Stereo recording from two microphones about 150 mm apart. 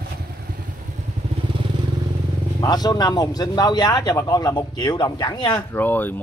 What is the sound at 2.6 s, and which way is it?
A man's voice, 25° left (ahead or behind).